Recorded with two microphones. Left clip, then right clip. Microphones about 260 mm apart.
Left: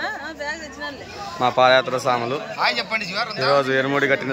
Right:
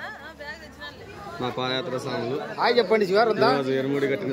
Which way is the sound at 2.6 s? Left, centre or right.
Right.